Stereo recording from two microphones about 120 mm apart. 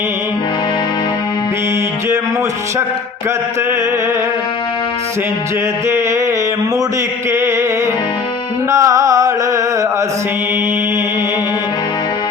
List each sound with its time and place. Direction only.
8.7 s music: 25° right (ahead or behind)